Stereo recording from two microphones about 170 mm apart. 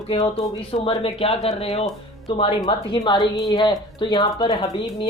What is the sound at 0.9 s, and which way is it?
Speech, 35° left (ahead or behind).